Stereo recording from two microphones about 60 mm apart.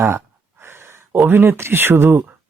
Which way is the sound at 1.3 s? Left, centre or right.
Right.